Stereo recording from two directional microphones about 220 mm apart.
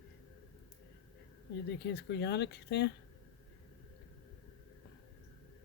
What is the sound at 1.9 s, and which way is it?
Speech, 50° left (ahead or behind).